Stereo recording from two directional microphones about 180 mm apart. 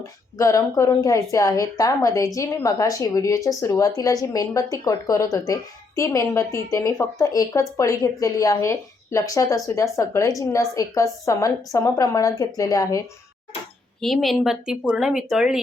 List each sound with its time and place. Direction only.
0.3 s a woman's voice: 15° left (ahead or behind)
14.0 s speech: centre (ahead or behind)